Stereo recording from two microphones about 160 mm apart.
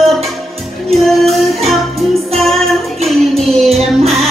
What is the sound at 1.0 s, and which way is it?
Music, centre (ahead or behind).